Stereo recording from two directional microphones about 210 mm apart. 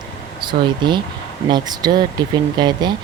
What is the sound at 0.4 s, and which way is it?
Speech, 20° right (ahead or behind).